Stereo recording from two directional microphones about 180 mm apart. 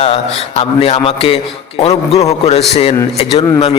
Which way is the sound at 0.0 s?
30° left (ahead or behind).